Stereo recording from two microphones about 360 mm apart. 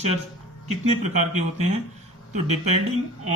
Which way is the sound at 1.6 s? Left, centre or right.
Centre.